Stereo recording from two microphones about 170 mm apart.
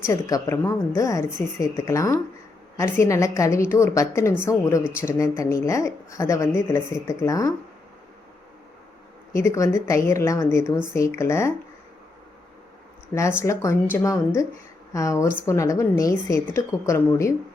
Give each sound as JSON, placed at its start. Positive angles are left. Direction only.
{"t": 0.0, "sound": "speech", "side_deg": 20}
{"t": 9.3, "sound": "speech", "side_deg": 15}
{"t": 13.1, "sound": "speech", "side_deg": 15}